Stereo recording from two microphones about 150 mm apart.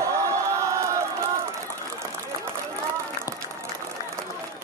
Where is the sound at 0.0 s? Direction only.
20° right (ahead or behind).